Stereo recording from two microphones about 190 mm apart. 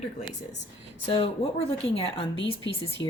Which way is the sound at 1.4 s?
35° left (ahead or behind).